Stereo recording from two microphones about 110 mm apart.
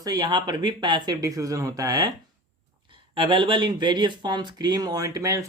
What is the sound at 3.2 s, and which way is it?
Speech, 50° right (ahead or behind).